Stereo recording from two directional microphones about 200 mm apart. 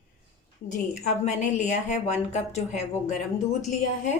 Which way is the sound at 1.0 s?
35° left (ahead or behind).